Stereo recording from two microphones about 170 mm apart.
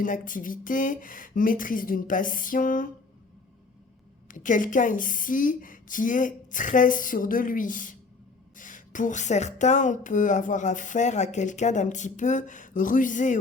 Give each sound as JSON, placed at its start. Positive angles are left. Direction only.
{"t": 0.0, "sound": "speech", "side_deg": 50}
{"t": 4.3, "sound": "speech", "side_deg": 50}